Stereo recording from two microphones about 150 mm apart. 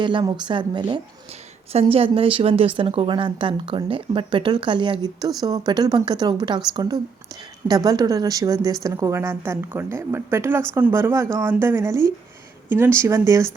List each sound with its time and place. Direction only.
0.0 s a woman's voice: 30° right (ahead or behind)
1.7 s a woman's voice: 40° right (ahead or behind); by 13.5 s 20° right (ahead or behind)